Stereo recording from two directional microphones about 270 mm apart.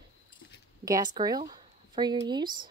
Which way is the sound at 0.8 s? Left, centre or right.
Centre.